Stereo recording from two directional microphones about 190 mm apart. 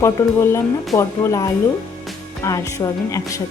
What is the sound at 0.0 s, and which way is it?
Speech, 15° left (ahead or behind).